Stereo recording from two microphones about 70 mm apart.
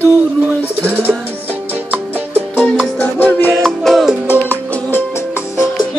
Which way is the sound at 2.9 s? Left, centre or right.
Left.